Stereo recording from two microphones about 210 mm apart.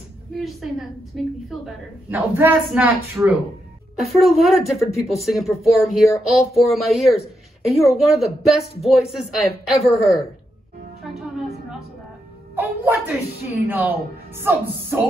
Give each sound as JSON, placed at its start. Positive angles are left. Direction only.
{"t": 0.4, "sound": "speech", "side_deg": 0}
{"t": 11.0, "sound": "music", "side_deg": 0}
{"t": 12.5, "sound": "speech", "side_deg": -10}